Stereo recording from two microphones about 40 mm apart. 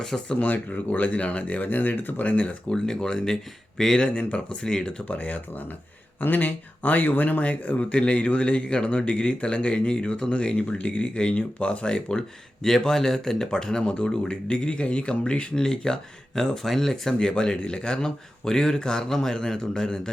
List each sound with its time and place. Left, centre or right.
0.3 s speech: left
2.6 s a man's voice: centre
3.9 s speech: left
5.0 s speech: left
6.1 s speech: left
12.6 s speech: centre
15.5 s a man's voice: centre
17.2 s a man's voice: centre